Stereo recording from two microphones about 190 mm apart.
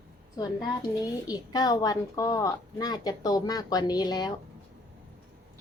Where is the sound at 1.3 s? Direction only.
20° left (ahead or behind).